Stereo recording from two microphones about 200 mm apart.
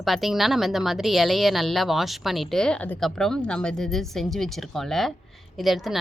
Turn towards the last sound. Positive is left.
turn(degrees=0)  # may be behind; listen again after turning